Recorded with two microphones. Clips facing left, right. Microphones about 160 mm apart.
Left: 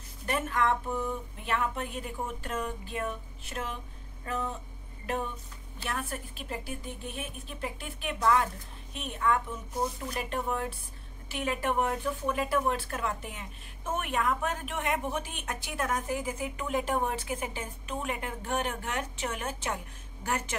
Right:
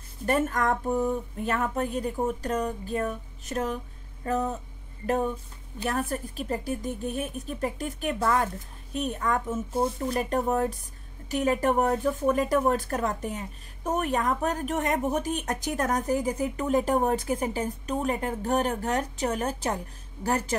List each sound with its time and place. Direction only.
0.3 s speech: 45° right (ahead or behind)